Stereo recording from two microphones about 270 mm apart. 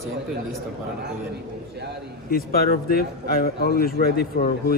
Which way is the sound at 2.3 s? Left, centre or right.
Left.